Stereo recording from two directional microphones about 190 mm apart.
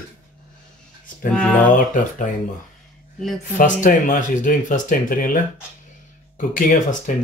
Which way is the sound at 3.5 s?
45° left (ahead or behind).